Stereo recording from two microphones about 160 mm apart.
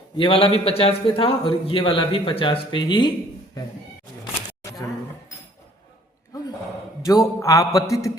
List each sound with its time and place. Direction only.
0.2 s a man's voice: 35° left (ahead or behind)
7.0 s a man's voice: 20° left (ahead or behind)